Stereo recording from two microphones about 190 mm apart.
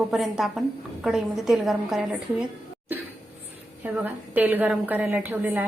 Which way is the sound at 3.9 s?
10° right (ahead or behind).